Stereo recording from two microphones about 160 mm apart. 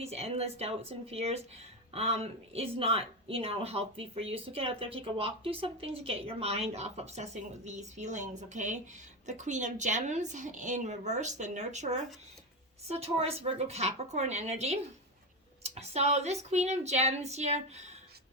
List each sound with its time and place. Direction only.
0.0 s a woman's voice: 40° right (ahead or behind)